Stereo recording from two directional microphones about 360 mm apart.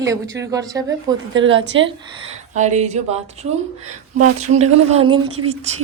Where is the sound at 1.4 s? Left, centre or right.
Right.